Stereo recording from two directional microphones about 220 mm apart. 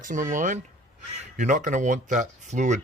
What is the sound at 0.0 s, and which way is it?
Speech, 35° right (ahead or behind).